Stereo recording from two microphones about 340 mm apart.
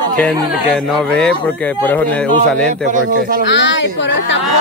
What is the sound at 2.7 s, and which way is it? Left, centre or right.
Speech, right.